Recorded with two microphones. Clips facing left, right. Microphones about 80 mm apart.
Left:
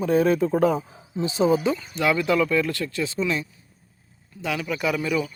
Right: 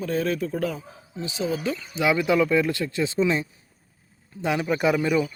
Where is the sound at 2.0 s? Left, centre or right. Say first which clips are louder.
Right 1 dB; centre.